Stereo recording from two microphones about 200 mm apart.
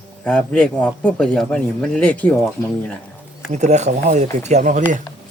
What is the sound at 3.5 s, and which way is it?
A man's voice, 35° right (ahead or behind).